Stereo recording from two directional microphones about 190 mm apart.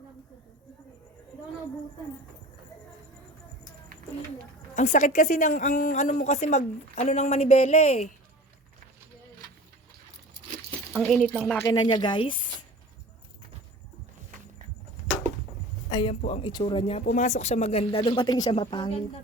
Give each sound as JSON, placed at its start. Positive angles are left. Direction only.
{"t": 4.7, "sound": "a woman's voice", "side_deg": 35}
{"t": 11.0, "sound": "speech", "side_deg": 5}
{"t": 11.7, "sound": "speech", "side_deg": 25}
{"t": 15.9, "sound": "speech", "side_deg": 25}
{"t": 17.1, "sound": "a woman's voice", "side_deg": 40}